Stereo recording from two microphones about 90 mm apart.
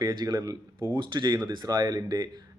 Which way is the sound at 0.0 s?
50° right (ahead or behind).